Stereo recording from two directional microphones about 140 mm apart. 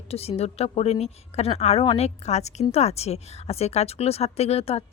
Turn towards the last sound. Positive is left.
turn(degrees=45)  # may be behind; listen again after turning